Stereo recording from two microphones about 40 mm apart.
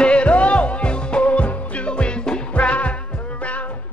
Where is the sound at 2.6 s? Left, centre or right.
Left.